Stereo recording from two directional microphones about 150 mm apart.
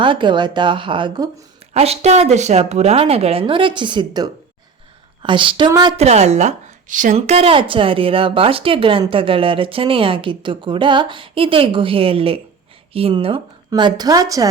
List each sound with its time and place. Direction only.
0.0 s a woman's voice: 35° right (ahead or behind)
1.7 s a woman's voice: 45° right (ahead or behind)
6.0 s a woman's voice: 50° right (ahead or behind)
7.2 s a woman's voice: 40° right (ahead or behind); by 14.4 s 25° right (ahead or behind)